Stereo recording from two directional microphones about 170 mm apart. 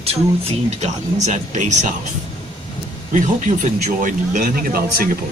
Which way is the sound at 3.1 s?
50° right (ahead or behind).